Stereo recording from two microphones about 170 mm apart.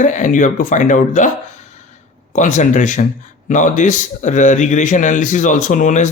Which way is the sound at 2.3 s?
45° left (ahead or behind).